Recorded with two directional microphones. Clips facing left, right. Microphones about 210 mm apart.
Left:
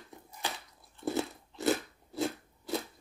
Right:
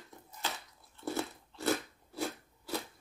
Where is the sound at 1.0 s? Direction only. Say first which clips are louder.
Left 4 dB; 15° left (ahead or behind).